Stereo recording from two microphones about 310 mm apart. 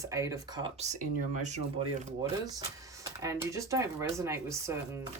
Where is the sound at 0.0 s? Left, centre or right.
Centre.